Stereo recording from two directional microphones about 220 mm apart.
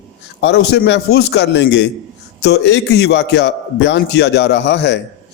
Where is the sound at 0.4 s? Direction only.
50° left (ahead or behind).